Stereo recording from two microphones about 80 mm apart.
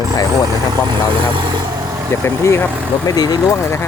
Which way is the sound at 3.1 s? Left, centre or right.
Left.